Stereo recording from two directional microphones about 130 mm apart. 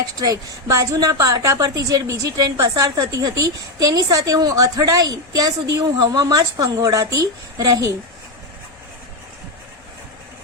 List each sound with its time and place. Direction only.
0.2 s a woman's voice: 30° right (ahead or behind)